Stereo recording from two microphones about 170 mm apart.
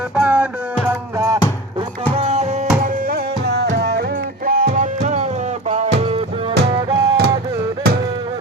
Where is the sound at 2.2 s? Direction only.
40° right (ahead or behind).